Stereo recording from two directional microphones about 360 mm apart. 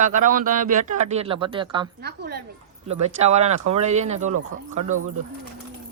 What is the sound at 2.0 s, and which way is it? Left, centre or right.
Speech, right.